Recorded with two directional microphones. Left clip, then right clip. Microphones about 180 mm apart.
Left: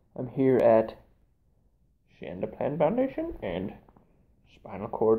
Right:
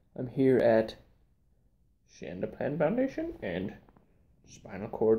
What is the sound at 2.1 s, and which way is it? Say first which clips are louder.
Speech: left 2 dB; 25° right (ahead or behind).